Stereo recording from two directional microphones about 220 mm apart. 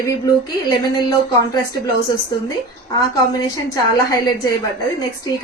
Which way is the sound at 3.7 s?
15° left (ahead or behind).